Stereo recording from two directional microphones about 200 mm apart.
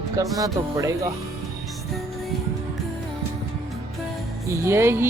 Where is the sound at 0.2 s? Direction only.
15° right (ahead or behind).